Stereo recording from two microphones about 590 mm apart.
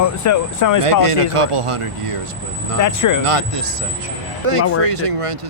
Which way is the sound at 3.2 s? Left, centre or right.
Right.